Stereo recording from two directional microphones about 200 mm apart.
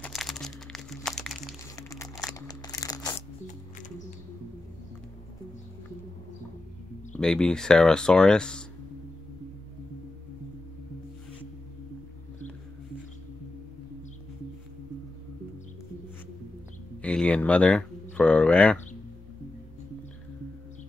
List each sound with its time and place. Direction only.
0.0 s music: centre (ahead or behind)
1.8 s crumpling: 15° left (ahead or behind)
2.3 s a sound: 20° left (ahead or behind)
7.2 s speech: 5° left (ahead or behind)
17.0 s speech: 5° left (ahead or behind)
18.1 s a sound: 5° left (ahead or behind)